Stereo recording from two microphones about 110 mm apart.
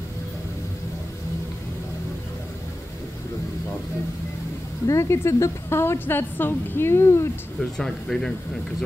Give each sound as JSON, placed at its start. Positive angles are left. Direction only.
{"t": 4.8, "sound": "a woman's voice", "side_deg": 25}
{"t": 7.7, "sound": "speech", "side_deg": 5}